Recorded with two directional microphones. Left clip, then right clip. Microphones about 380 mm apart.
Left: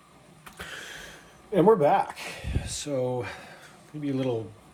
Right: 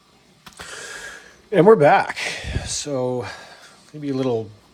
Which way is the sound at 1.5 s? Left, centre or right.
Right.